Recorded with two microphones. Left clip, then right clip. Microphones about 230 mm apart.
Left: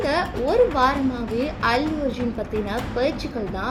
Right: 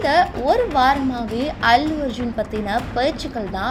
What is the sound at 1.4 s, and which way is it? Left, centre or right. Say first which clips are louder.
Speech: right 6 dB; right.